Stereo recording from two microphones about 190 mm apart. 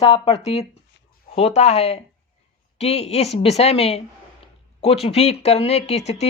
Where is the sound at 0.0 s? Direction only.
30° left (ahead or behind).